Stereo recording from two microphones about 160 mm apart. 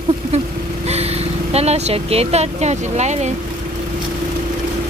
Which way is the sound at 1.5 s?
40° right (ahead or behind).